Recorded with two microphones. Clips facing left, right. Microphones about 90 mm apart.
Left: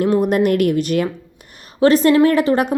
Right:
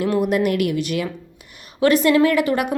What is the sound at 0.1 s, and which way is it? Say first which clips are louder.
Speech: left 4 dB; 40° left (ahead or behind).